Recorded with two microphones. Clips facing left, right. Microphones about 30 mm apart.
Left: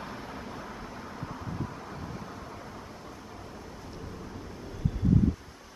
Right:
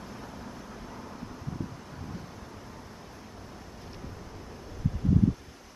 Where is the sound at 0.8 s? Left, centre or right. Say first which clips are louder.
Left 2 dB; centre.